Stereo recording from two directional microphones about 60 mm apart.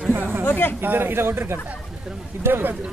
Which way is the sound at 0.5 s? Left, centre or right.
Left.